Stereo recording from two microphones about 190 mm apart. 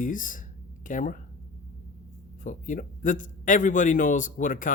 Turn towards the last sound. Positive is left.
turn(degrees=45)  # may be behind; listen again after turning